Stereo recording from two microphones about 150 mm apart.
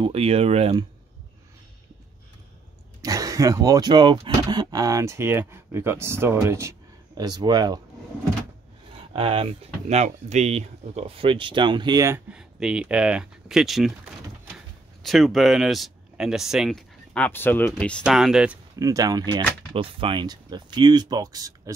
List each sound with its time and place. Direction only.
0.0 s speech: 40° right (ahead or behind)
3.0 s speech: 25° right (ahead or behind)
9.1 s speech: 40° right (ahead or behind)
12.3 s speech: 5° right (ahead or behind)
15.0 s speech: centre (ahead or behind)
18.0 s speech: 5° right (ahead or behind)
18.8 s speech: 20° right (ahead or behind)
19.7 s speech: 35° right (ahead or behind)